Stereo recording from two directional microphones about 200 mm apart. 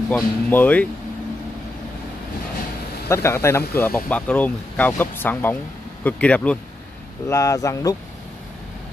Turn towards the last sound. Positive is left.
turn(degrees=15)  # may be behind; listen again after turning